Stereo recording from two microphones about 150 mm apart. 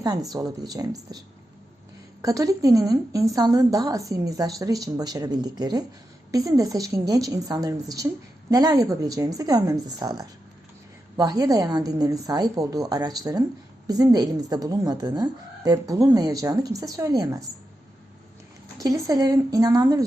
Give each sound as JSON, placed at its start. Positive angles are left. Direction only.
{"t": 0.0, "sound": "a woman's voice", "side_deg": -25}
{"t": 2.2, "sound": "a woman's voice", "side_deg": -20}
{"t": 18.8, "sound": "a woman's voice", "side_deg": -25}